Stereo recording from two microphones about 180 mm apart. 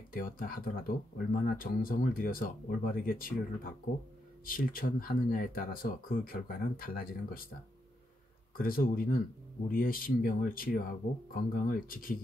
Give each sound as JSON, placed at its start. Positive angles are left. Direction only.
{"t": 0.1, "sound": "speech", "side_deg": 50}
{"t": 8.5, "sound": "speech", "side_deg": 55}